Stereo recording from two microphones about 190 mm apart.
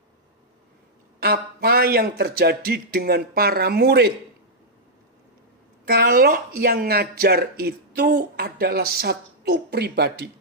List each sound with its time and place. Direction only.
1.2 s speech: 55° right (ahead or behind)
5.8 s speech: 55° right (ahead or behind)